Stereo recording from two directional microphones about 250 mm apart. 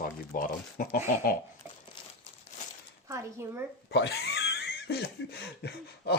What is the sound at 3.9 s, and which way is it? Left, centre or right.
Speech, left.